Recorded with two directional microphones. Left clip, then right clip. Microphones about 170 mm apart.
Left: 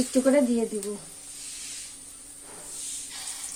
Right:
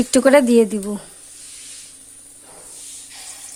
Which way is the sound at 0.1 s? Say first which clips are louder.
Right 11 dB; 65° right (ahead or behind).